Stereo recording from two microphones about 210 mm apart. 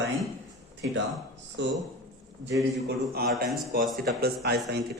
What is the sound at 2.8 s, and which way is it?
A man's voice, 45° right (ahead or behind).